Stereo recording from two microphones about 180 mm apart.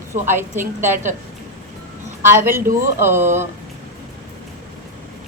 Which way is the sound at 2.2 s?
15° right (ahead or behind).